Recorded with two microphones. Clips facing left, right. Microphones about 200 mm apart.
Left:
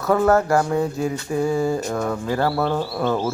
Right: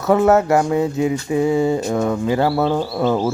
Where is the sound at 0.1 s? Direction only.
20° right (ahead or behind).